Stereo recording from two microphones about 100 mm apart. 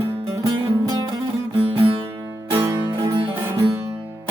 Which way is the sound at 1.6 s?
70° right (ahead or behind).